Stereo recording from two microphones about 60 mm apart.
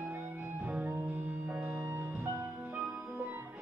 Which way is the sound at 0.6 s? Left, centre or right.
Centre.